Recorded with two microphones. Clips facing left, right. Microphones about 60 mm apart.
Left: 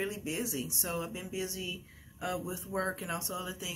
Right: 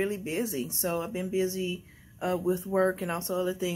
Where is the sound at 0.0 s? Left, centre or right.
Right.